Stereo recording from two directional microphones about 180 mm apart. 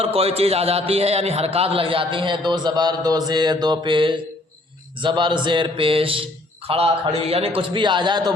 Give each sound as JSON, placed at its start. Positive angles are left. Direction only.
{"t": 0.0, "sound": "a man's voice", "side_deg": -35}